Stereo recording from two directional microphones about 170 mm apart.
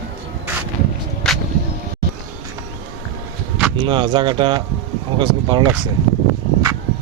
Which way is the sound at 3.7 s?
30° right (ahead or behind).